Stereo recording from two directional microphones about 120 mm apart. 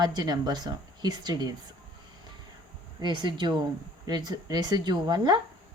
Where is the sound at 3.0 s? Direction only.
40° right (ahead or behind).